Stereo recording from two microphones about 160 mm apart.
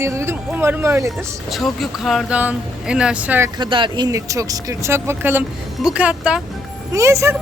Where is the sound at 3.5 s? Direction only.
30° right (ahead or behind); by 6.4 s 5° right (ahead or behind).